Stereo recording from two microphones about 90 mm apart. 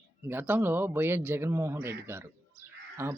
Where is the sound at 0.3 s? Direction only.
20° right (ahead or behind).